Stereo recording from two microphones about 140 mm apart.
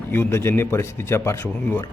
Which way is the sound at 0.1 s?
15° left (ahead or behind).